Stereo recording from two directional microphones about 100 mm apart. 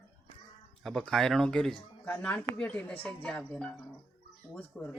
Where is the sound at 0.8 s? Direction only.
5° left (ahead or behind).